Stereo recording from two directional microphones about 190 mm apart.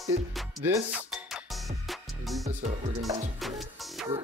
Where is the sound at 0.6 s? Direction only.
15° right (ahead or behind).